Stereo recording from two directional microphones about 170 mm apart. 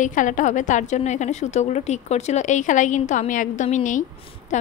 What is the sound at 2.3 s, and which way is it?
A woman's voice, 45° left (ahead or behind).